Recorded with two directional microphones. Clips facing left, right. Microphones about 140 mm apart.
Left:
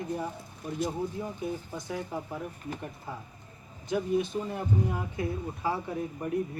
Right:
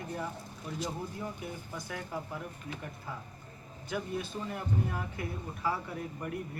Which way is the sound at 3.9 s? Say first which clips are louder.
Left 8 dB; 20° left (ahead or behind).